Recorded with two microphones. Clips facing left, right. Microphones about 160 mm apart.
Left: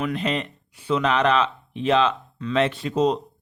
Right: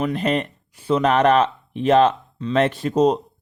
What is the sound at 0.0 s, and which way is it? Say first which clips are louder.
Speech: right 4 dB; 45° right (ahead or behind).